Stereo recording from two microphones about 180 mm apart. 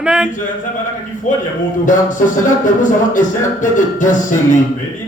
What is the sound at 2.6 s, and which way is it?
Speech, 45° left (ahead or behind).